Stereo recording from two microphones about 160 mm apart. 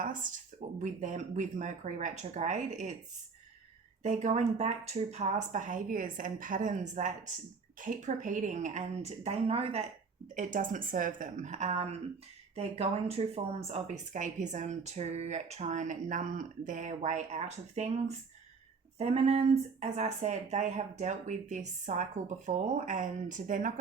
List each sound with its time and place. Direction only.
0.0 s speech: 55° right (ahead or behind)
4.0 s speech: 50° right (ahead or behind)
10.3 s speech: 55° right (ahead or behind)
18.9 s a sound: 40° right (ahead or behind)
19.8 s speech: 45° right (ahead or behind)